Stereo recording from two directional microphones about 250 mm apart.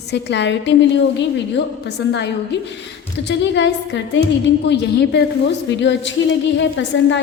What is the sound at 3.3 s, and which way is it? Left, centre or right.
A woman's voice, left.